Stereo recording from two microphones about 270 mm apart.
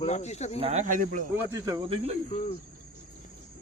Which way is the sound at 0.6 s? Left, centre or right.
Right.